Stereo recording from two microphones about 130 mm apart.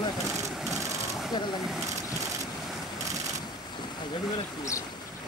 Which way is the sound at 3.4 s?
35° left (ahead or behind).